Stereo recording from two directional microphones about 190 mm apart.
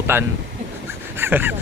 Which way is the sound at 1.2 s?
10° right (ahead or behind).